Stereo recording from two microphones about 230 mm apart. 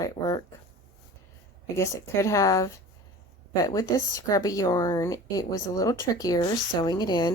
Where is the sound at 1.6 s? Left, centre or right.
Centre.